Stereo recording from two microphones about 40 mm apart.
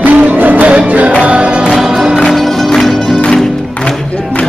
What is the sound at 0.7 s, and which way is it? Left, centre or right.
Music, right.